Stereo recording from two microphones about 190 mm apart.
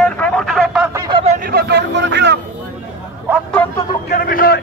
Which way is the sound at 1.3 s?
50° right (ahead or behind).